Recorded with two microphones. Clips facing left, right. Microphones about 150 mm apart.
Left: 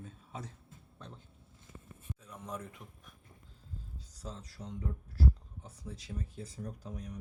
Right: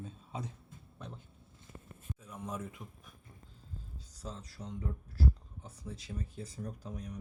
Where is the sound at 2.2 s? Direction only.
10° right (ahead or behind).